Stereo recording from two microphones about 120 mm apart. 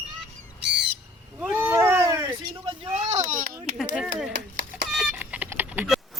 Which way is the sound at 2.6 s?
50° right (ahead or behind).